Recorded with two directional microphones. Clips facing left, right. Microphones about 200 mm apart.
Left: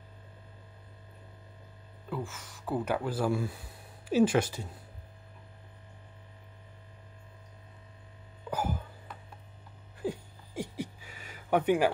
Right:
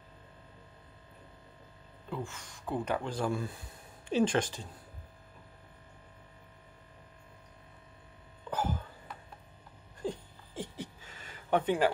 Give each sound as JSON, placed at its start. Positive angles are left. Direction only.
{"t": 2.0, "sound": "speech", "side_deg": 5}
{"t": 8.5, "sound": "throat clearing", "side_deg": 10}
{"t": 10.0, "sound": "a sound", "side_deg": 10}